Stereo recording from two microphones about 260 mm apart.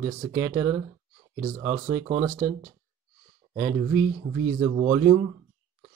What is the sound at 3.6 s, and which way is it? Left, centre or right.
Speech, centre.